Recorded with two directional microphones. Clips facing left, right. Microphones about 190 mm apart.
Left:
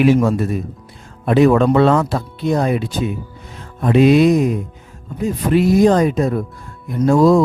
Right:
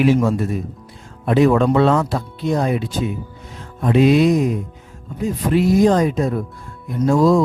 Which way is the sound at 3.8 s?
65° left (ahead or behind).